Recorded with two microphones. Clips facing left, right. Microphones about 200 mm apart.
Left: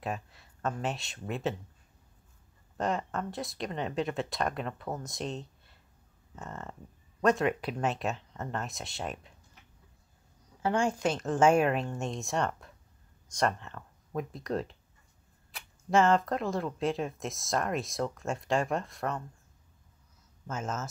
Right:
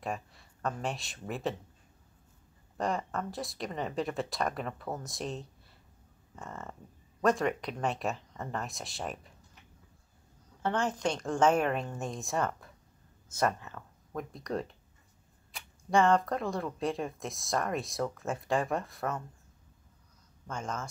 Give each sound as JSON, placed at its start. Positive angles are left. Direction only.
{"t": 0.0, "sound": "speech", "side_deg": 0}
{"t": 2.8, "sound": "speech", "side_deg": 0}
{"t": 10.6, "sound": "speech", "side_deg": 10}
{"t": 20.4, "sound": "speech", "side_deg": 5}